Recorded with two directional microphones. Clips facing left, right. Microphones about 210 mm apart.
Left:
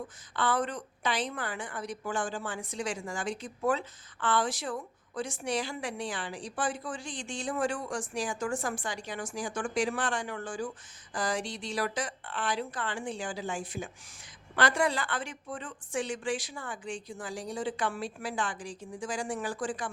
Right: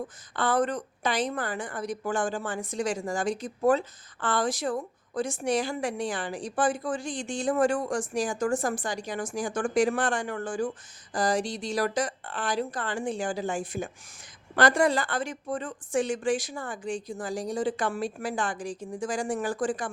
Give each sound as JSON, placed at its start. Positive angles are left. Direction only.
{"t": 0.3, "sound": "a woman's voice", "side_deg": -45}